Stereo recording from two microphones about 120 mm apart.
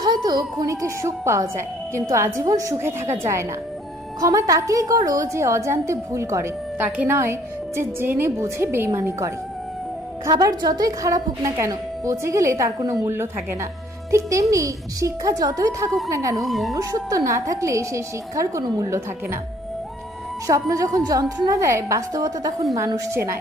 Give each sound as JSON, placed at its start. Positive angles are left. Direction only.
{"t": 0.0, "sound": "speech", "side_deg": -35}
{"t": 10.2, "sound": "speech", "side_deg": -35}
{"t": 16.5, "sound": "speech", "side_deg": 0}
{"t": 16.7, "sound": "speech", "side_deg": -30}
{"t": 20.5, "sound": "speech", "side_deg": -30}